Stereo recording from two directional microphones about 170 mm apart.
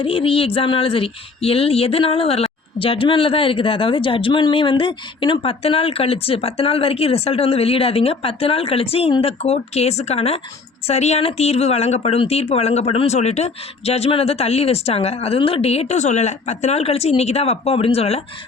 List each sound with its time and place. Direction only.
0.0 s speech: 30° left (ahead or behind)